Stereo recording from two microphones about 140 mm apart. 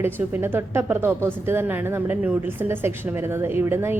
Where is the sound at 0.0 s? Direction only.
15° right (ahead or behind).